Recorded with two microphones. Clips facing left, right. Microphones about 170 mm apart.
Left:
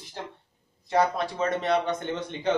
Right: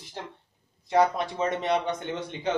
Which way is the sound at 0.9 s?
20° right (ahead or behind).